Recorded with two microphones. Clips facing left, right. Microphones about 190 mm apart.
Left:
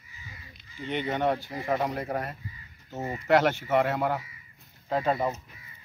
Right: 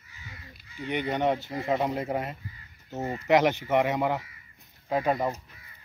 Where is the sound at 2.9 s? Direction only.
Centre (ahead or behind).